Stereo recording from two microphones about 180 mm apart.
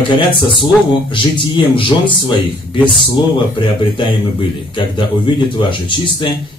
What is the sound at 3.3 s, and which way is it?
A man's voice, 30° left (ahead or behind).